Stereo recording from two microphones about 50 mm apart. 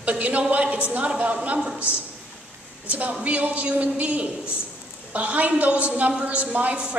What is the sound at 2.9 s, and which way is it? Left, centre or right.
A woman's voice, right.